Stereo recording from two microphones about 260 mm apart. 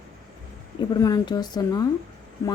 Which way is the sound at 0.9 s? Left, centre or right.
Centre.